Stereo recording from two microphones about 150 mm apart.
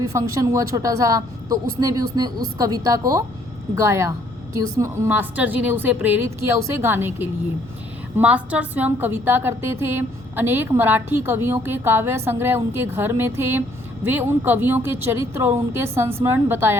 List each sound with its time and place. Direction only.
0.1 s a woman's voice: 20° right (ahead or behind)